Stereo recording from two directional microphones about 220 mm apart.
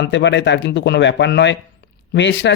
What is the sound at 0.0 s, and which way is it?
Speech, 55° left (ahead or behind).